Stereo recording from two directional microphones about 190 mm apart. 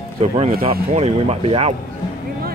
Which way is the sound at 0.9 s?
35° right (ahead or behind).